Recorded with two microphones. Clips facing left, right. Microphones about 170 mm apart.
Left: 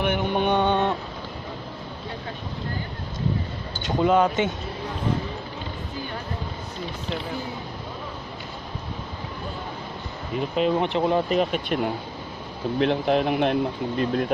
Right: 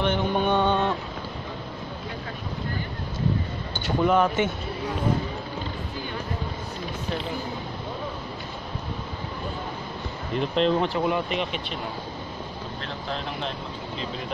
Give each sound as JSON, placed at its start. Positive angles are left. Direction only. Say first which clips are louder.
{"t": 0.0, "sound": "mantra", "louder": "left 1 dB", "side_deg": 15}
{"t": 3.8, "sound": "speech", "louder": "left 1 dB", "side_deg": 20}
{"t": 10.3, "sound": "speech", "louder": "even", "side_deg": 5}
{"t": 10.8, "sound": "speech", "louder": "left 2 dB", "side_deg": 25}
{"t": 12.7, "sound": "speech", "louder": "left 14 dB", "side_deg": 65}